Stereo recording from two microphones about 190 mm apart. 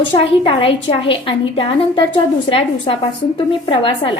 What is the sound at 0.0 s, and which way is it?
A woman's voice, 30° left (ahead or behind).